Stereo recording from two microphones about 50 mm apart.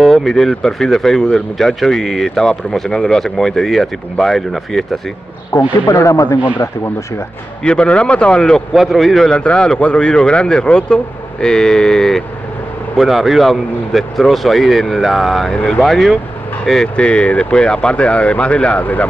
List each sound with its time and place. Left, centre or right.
0.0 s speech: centre
5.5 s a man's voice: left
7.6 s speech: centre
8.7 s speech: centre
9.3 s speech: centre
12.9 s speech: centre
16.8 s speech: left